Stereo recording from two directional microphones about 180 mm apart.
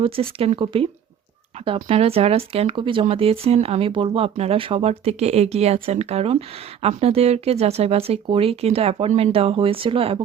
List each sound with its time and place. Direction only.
0.0 s speech: 30° right (ahead or behind)